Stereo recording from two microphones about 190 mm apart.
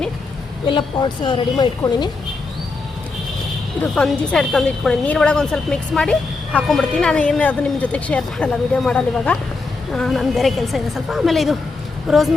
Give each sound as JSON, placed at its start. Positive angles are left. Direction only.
{"t": 0.7, "sound": "a woman's voice", "side_deg": 25}
{"t": 3.9, "sound": "a woman's voice", "side_deg": 5}